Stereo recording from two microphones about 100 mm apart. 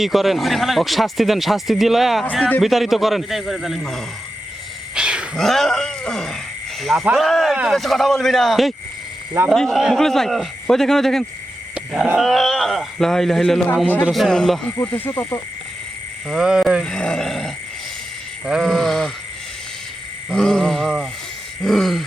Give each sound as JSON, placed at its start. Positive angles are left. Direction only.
{"t": 0.0, "sound": "speech", "side_deg": 0}
{"t": 4.9, "sound": "wild animals", "side_deg": -10}
{"t": 5.4, "sound": "speech", "side_deg": 5}
{"t": 11.7, "sound": "a sound", "side_deg": -5}
{"t": 12.1, "sound": "speech", "side_deg": 0}
{"t": 13.8, "sound": "a man's voice", "side_deg": 15}
{"t": 14.1, "sound": "speech", "side_deg": 5}
{"t": 14.9, "sound": "insect", "side_deg": 20}
{"t": 16.3, "sound": "speech", "side_deg": -5}
{"t": 16.8, "sound": "growling", "side_deg": 10}
{"t": 18.6, "sound": "speech", "side_deg": 5}
{"t": 20.3, "sound": "speech", "side_deg": 5}